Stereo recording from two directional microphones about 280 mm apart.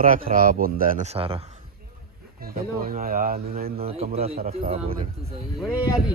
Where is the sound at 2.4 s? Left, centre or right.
Right.